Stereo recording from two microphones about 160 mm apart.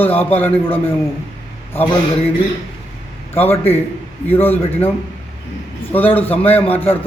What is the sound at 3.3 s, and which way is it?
A man's voice, 15° left (ahead or behind).